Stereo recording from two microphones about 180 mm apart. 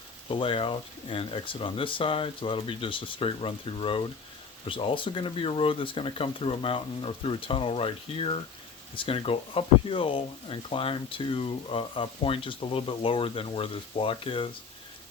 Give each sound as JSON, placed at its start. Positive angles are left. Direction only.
{"t": 0.3, "sound": "speech", "side_deg": 30}